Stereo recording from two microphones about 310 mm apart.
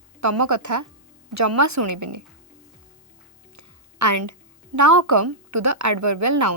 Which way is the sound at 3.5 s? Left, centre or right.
Right.